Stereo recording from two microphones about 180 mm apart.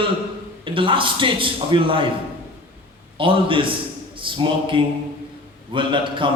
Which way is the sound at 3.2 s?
30° right (ahead or behind).